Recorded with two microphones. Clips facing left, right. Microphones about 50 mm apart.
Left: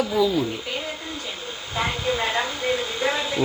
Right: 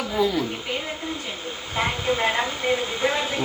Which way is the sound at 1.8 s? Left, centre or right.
Right.